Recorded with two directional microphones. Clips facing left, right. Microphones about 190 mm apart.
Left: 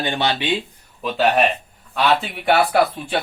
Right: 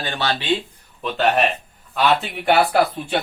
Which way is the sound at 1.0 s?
Centre (ahead or behind).